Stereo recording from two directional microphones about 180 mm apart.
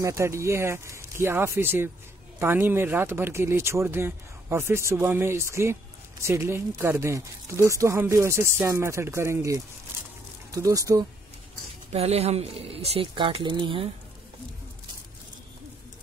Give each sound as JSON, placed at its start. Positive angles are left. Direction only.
{"t": 0.0, "sound": "speech", "side_deg": -15}
{"t": 11.9, "sound": "speech", "side_deg": -35}